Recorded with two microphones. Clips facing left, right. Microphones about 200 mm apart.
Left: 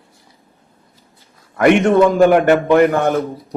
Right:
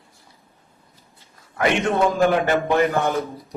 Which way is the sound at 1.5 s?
55° left (ahead or behind).